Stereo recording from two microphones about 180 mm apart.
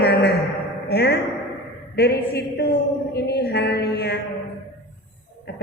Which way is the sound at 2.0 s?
65° left (ahead or behind).